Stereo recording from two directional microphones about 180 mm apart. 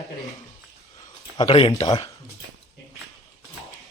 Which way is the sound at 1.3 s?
25° left (ahead or behind).